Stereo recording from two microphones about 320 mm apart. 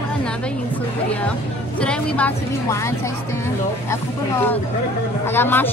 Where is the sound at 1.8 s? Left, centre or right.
Centre.